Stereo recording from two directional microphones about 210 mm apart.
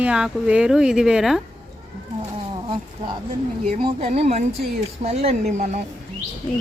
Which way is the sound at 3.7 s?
25° right (ahead or behind).